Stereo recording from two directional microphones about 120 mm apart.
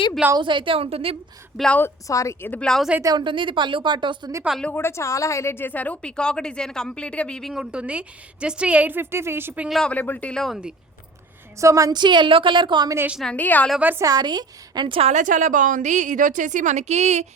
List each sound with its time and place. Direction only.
0.3 s a woman's voice: 45° right (ahead or behind)
1.5 s a woman's voice: 5° left (ahead or behind)
1.8 s a woman's voice: 25° left (ahead or behind)
2.5 s speech: 5° left (ahead or behind)
3.0 s a woman's voice: 35° right (ahead or behind)
4.6 s a woman's voice: 15° left (ahead or behind); by 9.6 s 20° right (ahead or behind)
9.6 s speech: centre (ahead or behind)
9.9 s a woman's voice: 15° left (ahead or behind)
11.6 s a woman's voice: 25° right (ahead or behind)
13.2 s a woman's voice: 15° left (ahead or behind)
13.7 s a woman's voice: 15° right (ahead or behind)
14.0 s a woman's voice: 35° right (ahead or behind); by 15.1 s 50° right (ahead or behind)
15.1 s a woman's voice: 90° right; by 17.2 s 70° right (ahead or behind)